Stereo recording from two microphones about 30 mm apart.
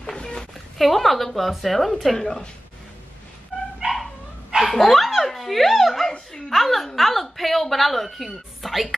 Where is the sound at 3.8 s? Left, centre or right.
Right.